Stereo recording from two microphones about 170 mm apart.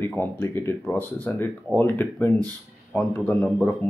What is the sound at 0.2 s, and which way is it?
Speech, 15° left (ahead or behind).